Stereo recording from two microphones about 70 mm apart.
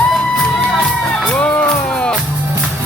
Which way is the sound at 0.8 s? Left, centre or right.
Centre.